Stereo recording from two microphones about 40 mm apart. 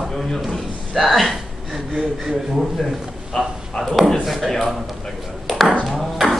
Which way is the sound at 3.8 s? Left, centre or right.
Centre.